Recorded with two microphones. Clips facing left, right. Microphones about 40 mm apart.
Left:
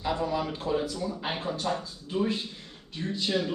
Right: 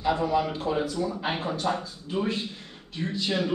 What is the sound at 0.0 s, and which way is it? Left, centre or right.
Speech, centre.